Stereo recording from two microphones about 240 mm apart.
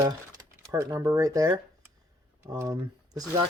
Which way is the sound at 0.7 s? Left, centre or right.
Centre.